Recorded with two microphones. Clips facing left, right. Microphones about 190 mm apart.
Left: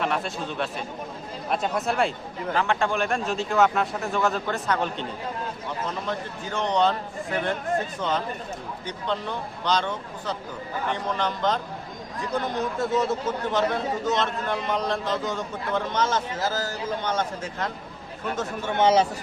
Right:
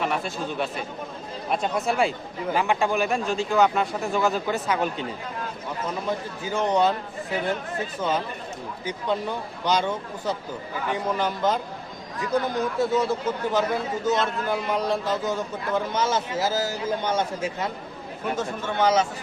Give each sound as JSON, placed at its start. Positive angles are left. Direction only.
{"t": 0.0, "sound": "a man's voice", "side_deg": 0}
{"t": 6.1, "sound": "a man's voice", "side_deg": -5}
{"t": 8.9, "sound": "a man's voice", "side_deg": -10}
{"t": 18.7, "sound": "speech", "side_deg": 25}